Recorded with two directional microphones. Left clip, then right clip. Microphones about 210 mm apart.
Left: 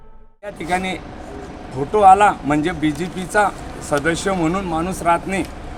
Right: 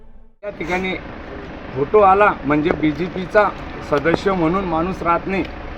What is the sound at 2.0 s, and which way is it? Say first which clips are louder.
Speech: left 2 dB; 15° left (ahead or behind).